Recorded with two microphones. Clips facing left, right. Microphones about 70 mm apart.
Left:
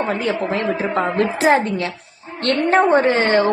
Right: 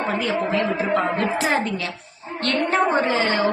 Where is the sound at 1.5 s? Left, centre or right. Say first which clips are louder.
Left 6 dB; left.